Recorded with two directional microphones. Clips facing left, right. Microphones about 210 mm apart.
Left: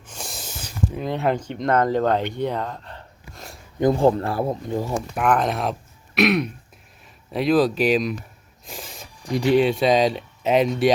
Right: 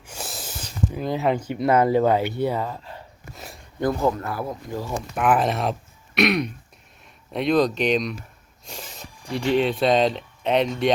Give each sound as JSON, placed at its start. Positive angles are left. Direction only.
{"t": 0.0, "sound": "a sound", "side_deg": -5}
{"t": 0.9, "sound": "speech", "side_deg": 0}
{"t": 3.3, "sound": "a sound", "side_deg": 0}
{"t": 3.8, "sound": "speech", "side_deg": 25}
{"t": 5.1, "sound": "speech", "side_deg": 0}
{"t": 9.3, "sound": "speech", "side_deg": 10}